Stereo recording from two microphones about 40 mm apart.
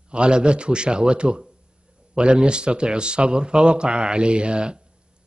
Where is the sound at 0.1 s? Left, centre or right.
Right.